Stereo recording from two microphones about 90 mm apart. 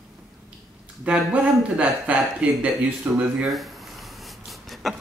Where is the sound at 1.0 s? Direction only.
15° right (ahead or behind).